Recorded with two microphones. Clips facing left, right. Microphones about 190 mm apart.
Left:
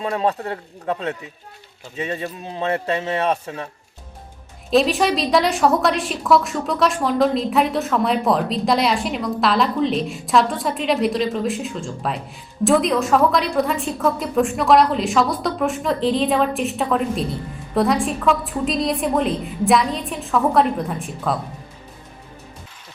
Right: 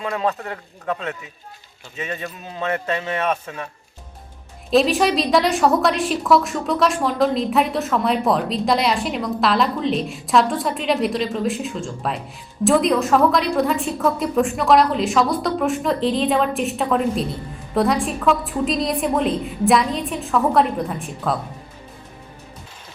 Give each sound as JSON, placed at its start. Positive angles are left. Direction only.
{"t": 0.0, "sound": "speech", "side_deg": 30}
{"t": 4.7, "sound": "a woman's voice", "side_deg": 0}